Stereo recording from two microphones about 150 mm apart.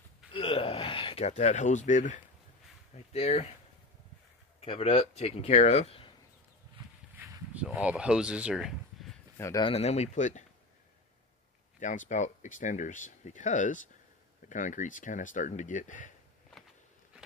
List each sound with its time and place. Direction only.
0.3 s gasp: 35° left (ahead or behind); by 2.1 s 55° left (ahead or behind)
2.9 s speech: 45° left (ahead or behind)
4.6 s speech: 40° left (ahead or behind)
7.2 s a sound: 10° right (ahead or behind)
9.6 s speech: 40° left (ahead or behind)
11.8 s speech: 55° left (ahead or behind)